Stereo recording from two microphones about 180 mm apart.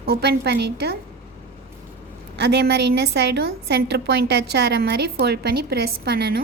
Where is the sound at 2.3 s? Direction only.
70° right (ahead or behind).